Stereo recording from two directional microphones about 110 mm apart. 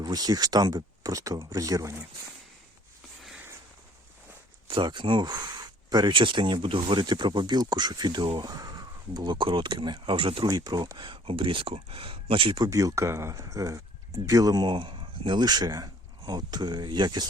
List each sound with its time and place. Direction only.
0.0 s speech: 35° right (ahead or behind)
4.7 s speech: 45° right (ahead or behind)
12.6 s speech: 30° right (ahead or behind)